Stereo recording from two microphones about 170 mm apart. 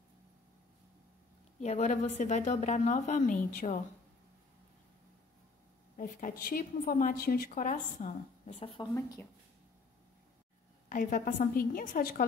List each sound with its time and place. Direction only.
1.6 s a woman's voice: 45° left (ahead or behind)
5.9 s a woman's voice: 50° left (ahead or behind); by 8.8 s 35° left (ahead or behind)
8.9 s speech: 15° left (ahead or behind)
10.9 s a woman's voice: 50° left (ahead or behind)